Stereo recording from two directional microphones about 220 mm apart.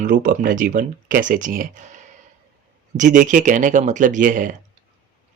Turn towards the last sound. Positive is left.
turn(degrees=-35)  # may be behind; listen again after turning